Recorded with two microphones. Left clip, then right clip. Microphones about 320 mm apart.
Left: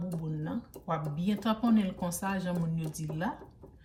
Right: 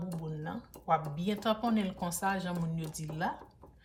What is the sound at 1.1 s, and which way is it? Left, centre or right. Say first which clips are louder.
Speech: right 1 dB; centre.